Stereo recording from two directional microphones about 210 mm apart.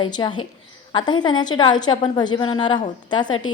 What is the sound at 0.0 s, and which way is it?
A woman's voice, 20° left (ahead or behind).